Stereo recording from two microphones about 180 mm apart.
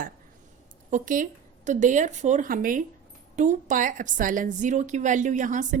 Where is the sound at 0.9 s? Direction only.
45° right (ahead or behind).